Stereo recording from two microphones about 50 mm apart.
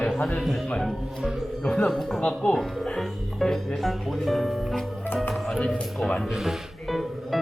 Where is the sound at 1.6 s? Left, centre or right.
Centre.